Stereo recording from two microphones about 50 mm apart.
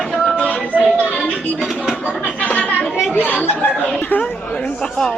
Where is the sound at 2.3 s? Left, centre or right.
Left.